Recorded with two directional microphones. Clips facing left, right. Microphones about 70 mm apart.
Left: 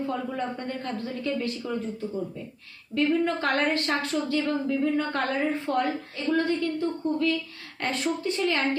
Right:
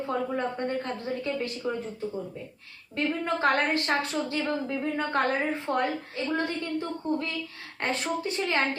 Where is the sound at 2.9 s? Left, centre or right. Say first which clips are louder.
Left 4 dB; right.